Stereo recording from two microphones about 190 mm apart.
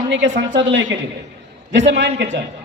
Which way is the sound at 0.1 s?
70° right (ahead or behind).